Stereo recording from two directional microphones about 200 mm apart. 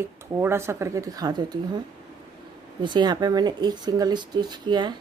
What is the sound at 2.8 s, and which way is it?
Speech, 20° right (ahead or behind).